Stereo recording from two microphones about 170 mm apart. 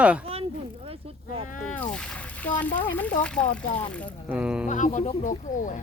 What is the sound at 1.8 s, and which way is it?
Speech, 5° left (ahead or behind).